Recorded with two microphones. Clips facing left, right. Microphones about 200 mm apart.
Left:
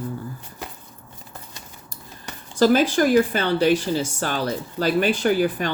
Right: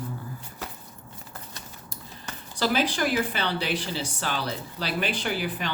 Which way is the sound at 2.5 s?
45° left (ahead or behind).